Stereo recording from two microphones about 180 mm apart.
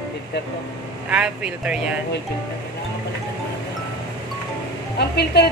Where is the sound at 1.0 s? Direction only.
5° right (ahead or behind).